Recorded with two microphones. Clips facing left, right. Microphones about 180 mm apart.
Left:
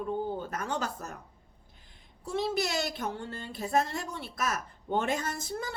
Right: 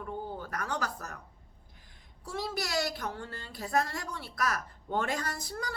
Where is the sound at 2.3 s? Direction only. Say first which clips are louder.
Left 5 dB; 25° left (ahead or behind).